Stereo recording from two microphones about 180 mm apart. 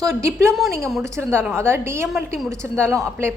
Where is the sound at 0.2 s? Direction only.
15° right (ahead or behind).